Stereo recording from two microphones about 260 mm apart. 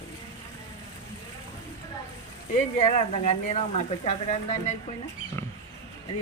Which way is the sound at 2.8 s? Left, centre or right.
Left.